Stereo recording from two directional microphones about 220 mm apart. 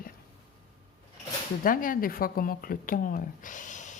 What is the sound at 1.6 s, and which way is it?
Speech, 40° left (ahead or behind).